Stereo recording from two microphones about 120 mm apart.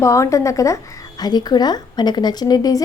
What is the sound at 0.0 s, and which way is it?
Speech, 25° left (ahead or behind).